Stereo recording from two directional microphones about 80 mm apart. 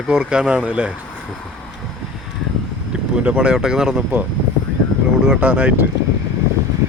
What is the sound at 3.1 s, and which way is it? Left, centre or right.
Speech, centre.